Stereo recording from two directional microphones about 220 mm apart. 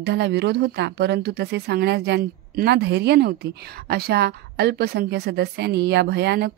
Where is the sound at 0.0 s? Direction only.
50° right (ahead or behind).